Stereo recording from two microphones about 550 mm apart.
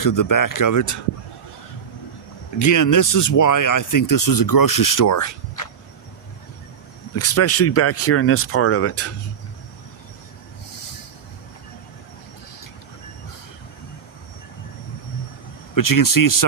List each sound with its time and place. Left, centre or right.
0.0 s speech: left
2.6 s speech: left
7.2 s speech: left
15.7 s speech: left